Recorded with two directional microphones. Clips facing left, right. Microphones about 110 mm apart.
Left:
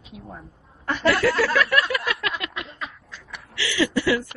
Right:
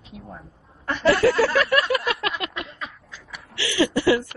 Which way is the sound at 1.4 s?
30° right (ahead or behind).